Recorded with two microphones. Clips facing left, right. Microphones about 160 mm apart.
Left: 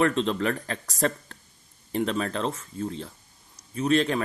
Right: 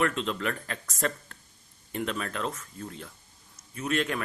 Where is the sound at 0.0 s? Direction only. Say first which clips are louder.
Left 5 dB; 35° left (ahead or behind).